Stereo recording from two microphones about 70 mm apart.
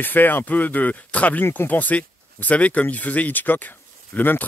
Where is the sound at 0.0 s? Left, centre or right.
Left.